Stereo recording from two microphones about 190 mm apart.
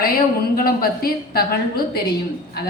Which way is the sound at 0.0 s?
50° left (ahead or behind).